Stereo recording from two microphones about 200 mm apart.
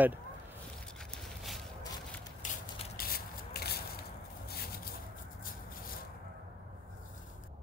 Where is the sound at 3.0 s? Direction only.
50° left (ahead or behind).